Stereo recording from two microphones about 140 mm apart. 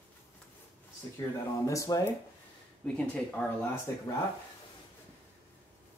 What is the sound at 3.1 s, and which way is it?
Speech, 10° left (ahead or behind).